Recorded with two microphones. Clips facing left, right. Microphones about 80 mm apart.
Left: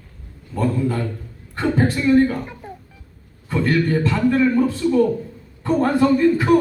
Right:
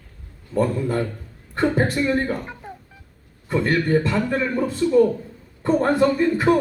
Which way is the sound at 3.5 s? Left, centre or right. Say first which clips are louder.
Even; right.